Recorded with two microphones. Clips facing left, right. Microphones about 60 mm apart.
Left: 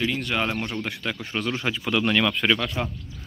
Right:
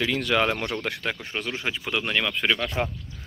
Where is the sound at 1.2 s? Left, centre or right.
Centre.